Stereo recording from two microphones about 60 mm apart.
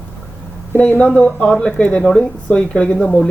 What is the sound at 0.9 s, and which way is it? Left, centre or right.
Speech, left.